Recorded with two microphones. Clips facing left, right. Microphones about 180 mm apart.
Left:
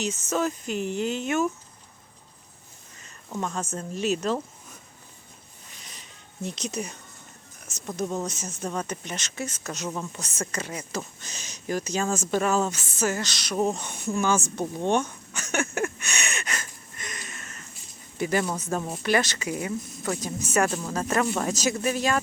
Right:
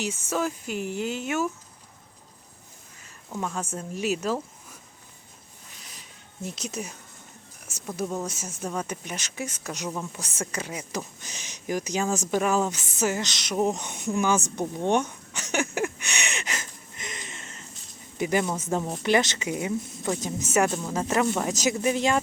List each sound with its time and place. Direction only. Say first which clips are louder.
0.0 s speech: left 1 dB; 10° right (ahead or behind)
3.0 s a sound: left 1 dB; 5° right (ahead or behind)
3.5 s a woman's voice: left 1 dB; 10° right (ahead or behind)
5.7 s a sound: left 1 dB; 5° right (ahead or behind)
7.7 s speech: left 1 dB; 10° right (ahead or behind)
14.5 s a sound: even; 15° right (ahead or behind)
18.2 s speech: right 1 dB; 15° right (ahead or behind)
20.7 s speech: right 1 dB; centre (ahead or behind)
20.9 s speech: right 1 dB; 15° right (ahead or behind)